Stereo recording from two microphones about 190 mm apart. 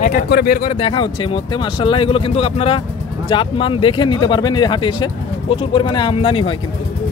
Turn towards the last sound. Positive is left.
turn(degrees=30)  # may be behind; listen again after turning